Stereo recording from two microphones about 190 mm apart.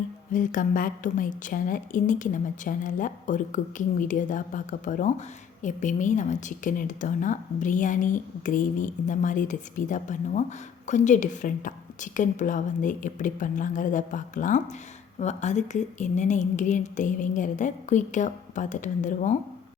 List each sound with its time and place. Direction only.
0.3 s a woman's voice: 45° left (ahead or behind)